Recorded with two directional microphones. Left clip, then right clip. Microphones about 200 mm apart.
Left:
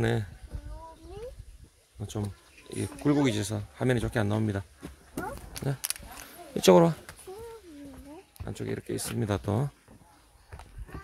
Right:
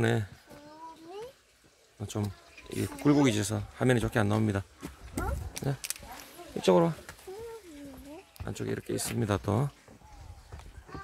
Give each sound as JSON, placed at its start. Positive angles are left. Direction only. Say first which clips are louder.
{"t": 0.0, "sound": "speech", "louder": "even", "side_deg": 0}
{"t": 2.0, "sound": "speech", "louder": "right 1 dB", "side_deg": -5}
{"t": 5.1, "sound": "a sound", "louder": "even", "side_deg": 5}
{"t": 6.6, "sound": "speech", "louder": "left 5 dB", "side_deg": 30}
{"t": 8.5, "sound": "speech", "louder": "even", "side_deg": 0}